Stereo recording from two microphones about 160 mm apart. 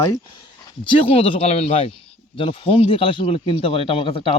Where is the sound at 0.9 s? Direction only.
35° left (ahead or behind).